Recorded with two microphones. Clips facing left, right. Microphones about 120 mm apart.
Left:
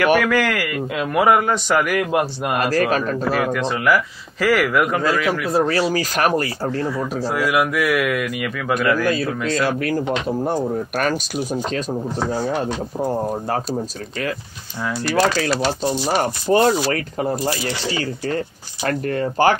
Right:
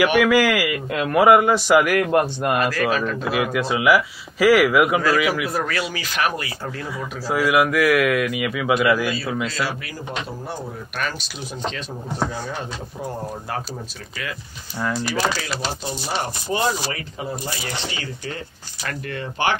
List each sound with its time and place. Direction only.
0.0 s a man's voice: centre (ahead or behind)
2.6 s speech: 40° left (ahead or behind)
3.3 s a man's voice: 5° right (ahead or behind)
5.5 s speech: 30° left (ahead or behind)
7.2 s a man's voice: centre (ahead or behind)
9.0 s speech: 50° left (ahead or behind)
12.3 s speech: 40° left (ahead or behind)
14.8 s a man's voice: centre (ahead or behind)
15.1 s speech: 50° left (ahead or behind)
18.9 s speech: 40° left (ahead or behind)